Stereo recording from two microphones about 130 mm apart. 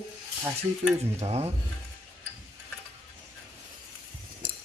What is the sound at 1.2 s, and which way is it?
Speech, 55° right (ahead or behind).